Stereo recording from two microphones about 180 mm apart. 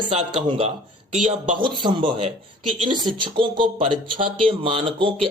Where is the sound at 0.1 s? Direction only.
35° right (ahead or behind).